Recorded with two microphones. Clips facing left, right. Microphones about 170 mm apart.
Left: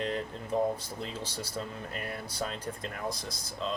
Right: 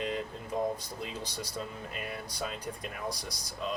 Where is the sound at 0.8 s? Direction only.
15° right (ahead or behind).